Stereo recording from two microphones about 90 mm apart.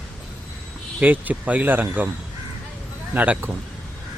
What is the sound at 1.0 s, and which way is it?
Speech, 20° right (ahead or behind).